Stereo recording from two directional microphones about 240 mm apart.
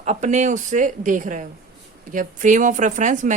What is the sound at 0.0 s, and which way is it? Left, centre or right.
A woman's voice, right.